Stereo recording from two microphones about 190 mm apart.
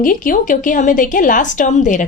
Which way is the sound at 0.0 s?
45° left (ahead or behind).